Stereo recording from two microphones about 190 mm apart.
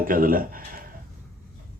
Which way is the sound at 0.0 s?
45° right (ahead or behind).